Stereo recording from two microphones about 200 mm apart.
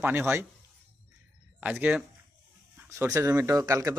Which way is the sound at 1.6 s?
10° right (ahead or behind).